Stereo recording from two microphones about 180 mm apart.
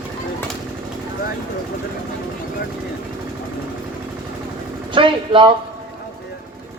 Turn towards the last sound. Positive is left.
turn(degrees=-30)  # may be behind; listen again after turning